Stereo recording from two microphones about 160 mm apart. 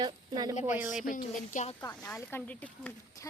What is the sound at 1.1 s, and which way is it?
Speech, 50° left (ahead or behind).